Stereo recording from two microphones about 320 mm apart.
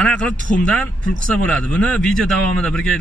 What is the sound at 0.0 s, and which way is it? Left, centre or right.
Speech, centre.